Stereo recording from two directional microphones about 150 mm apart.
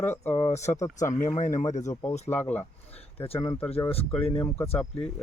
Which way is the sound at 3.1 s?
40° left (ahead or behind).